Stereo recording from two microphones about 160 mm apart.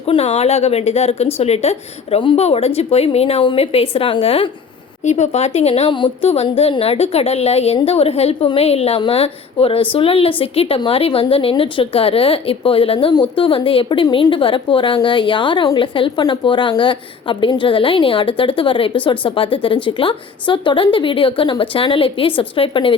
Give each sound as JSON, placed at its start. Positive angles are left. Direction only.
{"t": 0.0, "sound": "a woman's voice", "side_deg": 40}